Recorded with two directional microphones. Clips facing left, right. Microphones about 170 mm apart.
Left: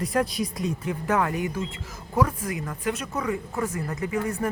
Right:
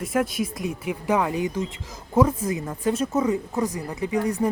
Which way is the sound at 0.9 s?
15° right (ahead or behind).